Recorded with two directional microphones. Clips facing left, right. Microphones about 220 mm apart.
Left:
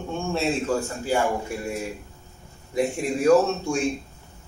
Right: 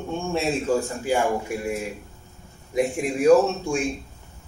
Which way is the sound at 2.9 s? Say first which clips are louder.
Right 2 dB; 15° right (ahead or behind).